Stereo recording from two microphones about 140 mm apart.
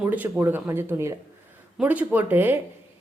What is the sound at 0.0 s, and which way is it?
A woman's voice, 10° right (ahead or behind).